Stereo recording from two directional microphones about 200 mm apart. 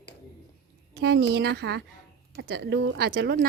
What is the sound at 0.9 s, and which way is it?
Speech, 55° right (ahead or behind).